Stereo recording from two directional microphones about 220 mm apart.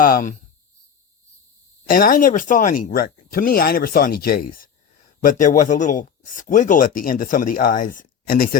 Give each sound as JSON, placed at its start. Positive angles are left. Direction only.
{"t": 0.0, "sound": "speech", "side_deg": 35}
{"t": 1.9, "sound": "speech", "side_deg": 40}